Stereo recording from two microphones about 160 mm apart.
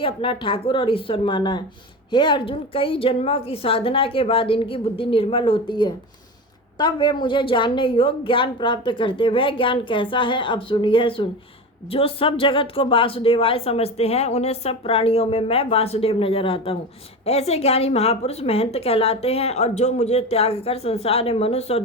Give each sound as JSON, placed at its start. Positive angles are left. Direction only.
{"t": 0.0, "sound": "speech", "side_deg": 35}